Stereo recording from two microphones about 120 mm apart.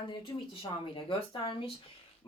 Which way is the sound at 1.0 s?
45° left (ahead or behind).